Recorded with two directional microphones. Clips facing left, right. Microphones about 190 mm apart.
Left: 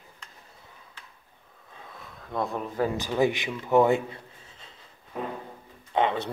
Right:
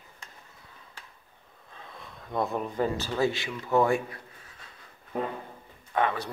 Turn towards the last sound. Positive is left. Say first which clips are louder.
# left 2 dB
turn(degrees=25)  # may be behind; listen again after turning